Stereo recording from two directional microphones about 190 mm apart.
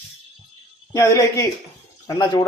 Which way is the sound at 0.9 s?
15° left (ahead or behind).